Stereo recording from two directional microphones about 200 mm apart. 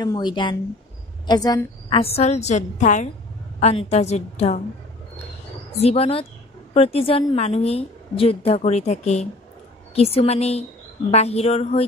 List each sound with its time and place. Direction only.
0.0 s a woman's voice: 20° left (ahead or behind)
5.8 s a woman's voice: 30° left (ahead or behind)